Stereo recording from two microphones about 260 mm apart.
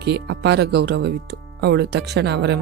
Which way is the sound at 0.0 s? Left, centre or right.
Right.